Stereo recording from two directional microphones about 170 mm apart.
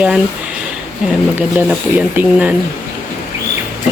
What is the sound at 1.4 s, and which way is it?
Speech, 10° right (ahead or behind).